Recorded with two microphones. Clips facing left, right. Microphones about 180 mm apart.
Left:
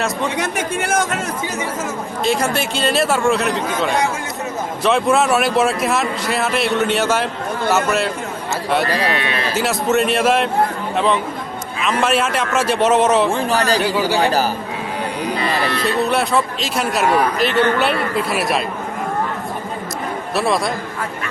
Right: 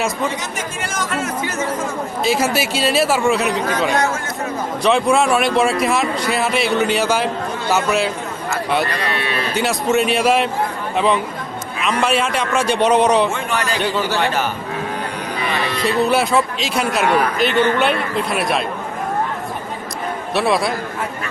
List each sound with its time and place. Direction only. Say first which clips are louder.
0.3 s speech: left 5 dB; 60° left (ahead or behind)
2.2 s speech: even; 5° right (ahead or behind)
9.5 s speech: even; centre (ahead or behind)
13.3 s a man's voice: left 4 dB; 35° left (ahead or behind)
15.7 s speech: right 5 dB; centre (ahead or behind)
20.3 s speech: right 1 dB; centre (ahead or behind)